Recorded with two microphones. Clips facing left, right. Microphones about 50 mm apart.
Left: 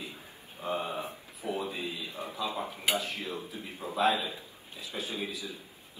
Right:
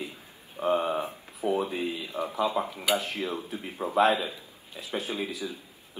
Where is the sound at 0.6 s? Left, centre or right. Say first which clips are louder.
Right 7 dB; right.